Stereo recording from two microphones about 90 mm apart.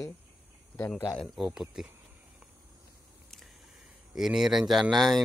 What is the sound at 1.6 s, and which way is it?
Speech, 5° right (ahead or behind).